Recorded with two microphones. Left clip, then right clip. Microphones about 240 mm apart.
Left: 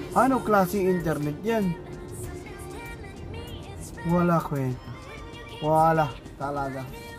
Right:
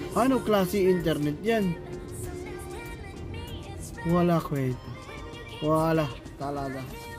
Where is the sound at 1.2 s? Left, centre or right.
Centre.